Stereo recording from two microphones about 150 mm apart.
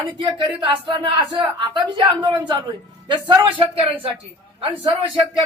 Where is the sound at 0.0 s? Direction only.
30° right (ahead or behind).